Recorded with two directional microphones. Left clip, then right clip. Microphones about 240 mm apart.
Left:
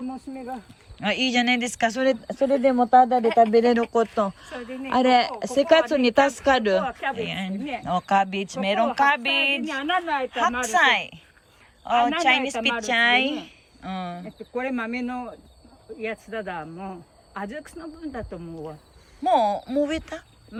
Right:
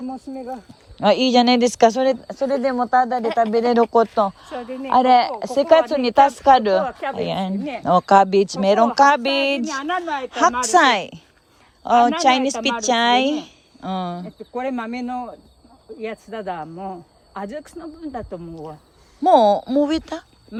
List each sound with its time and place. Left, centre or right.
0.1 s a woman's voice: right
0.5 s speech: centre
2.0 s speech: centre
4.4 s speech: right
4.9 s a woman's voice: centre
14.3 s a woman's voice: right
18.5 s speech: centre
20.5 s speech: right